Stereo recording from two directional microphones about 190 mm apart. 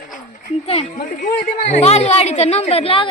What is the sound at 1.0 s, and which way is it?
Speech, 45° left (ahead or behind).